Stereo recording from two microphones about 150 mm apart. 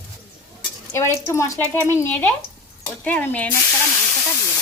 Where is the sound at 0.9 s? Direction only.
20° left (ahead or behind).